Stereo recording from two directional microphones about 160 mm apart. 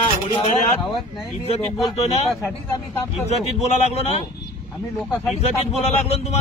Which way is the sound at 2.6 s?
20° left (ahead or behind).